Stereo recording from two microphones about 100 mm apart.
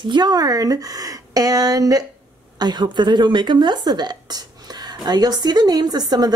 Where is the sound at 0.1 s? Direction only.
45° right (ahead or behind).